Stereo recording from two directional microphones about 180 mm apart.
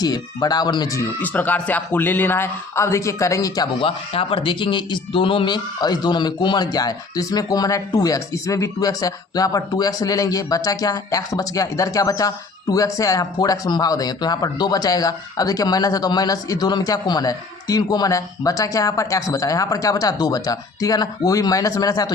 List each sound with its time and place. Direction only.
0.0 s speech: 20° left (ahead or behind)